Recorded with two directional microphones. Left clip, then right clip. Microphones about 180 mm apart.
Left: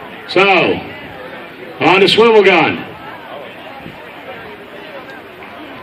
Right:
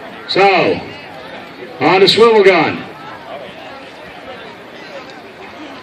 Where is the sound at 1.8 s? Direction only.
45° left (ahead or behind).